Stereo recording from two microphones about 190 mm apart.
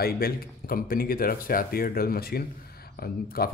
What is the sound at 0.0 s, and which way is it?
Speech, 50° left (ahead or behind).